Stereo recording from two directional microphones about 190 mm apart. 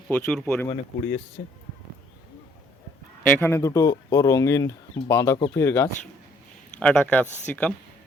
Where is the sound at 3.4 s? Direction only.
15° left (ahead or behind).